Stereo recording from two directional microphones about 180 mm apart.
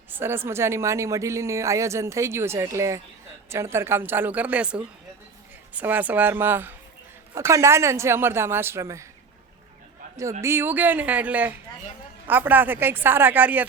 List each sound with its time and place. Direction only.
0.1 s speech: 15° right (ahead or behind)
10.4 s speech: 15° right (ahead or behind)